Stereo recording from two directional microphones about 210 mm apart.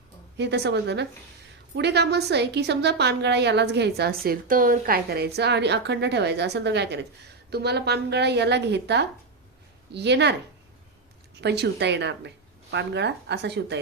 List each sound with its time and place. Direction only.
0.3 s a woman's voice: 55° right (ahead or behind)
11.3 s speech: 50° right (ahead or behind)